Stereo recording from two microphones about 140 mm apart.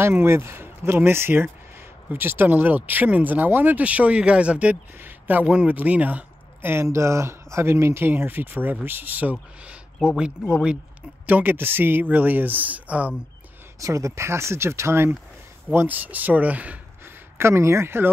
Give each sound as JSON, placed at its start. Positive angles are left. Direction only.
{"t": 0.0, "sound": "speech", "side_deg": -15}
{"t": 13.7, "sound": "speech", "side_deg": -25}